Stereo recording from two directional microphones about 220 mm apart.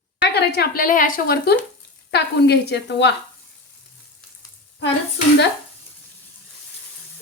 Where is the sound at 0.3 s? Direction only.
45° left (ahead or behind).